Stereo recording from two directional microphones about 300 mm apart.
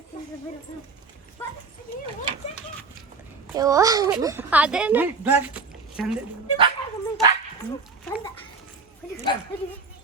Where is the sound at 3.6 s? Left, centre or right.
Centre.